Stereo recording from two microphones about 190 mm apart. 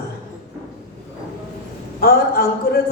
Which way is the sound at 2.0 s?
55° left (ahead or behind).